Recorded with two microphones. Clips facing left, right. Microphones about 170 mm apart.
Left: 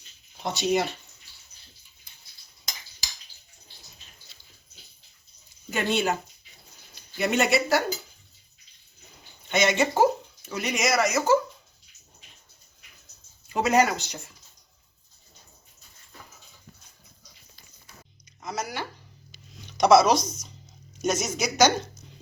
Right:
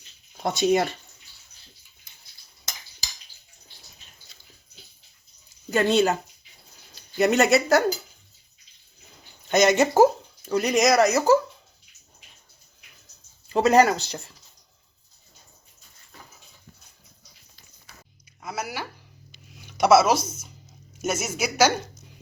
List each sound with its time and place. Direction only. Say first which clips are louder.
0.4 s speech: right 4 dB; 50° right (ahead or behind)
5.7 s speech: right 5 dB; 40° right (ahead or behind)
9.5 s speech: right 4 dB; 40° right (ahead or behind)
13.5 s speech: right 4 dB; 35° right (ahead or behind)
18.4 s a sound: even; 10° right (ahead or behind)
19.6 s speech: even; 5° right (ahead or behind)